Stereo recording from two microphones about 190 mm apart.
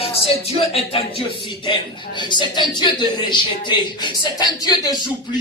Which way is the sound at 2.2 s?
25° left (ahead or behind).